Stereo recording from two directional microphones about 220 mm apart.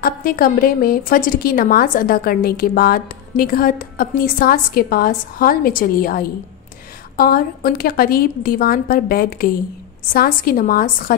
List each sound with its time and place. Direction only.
0.0 s a woman's voice: 40° left (ahead or behind)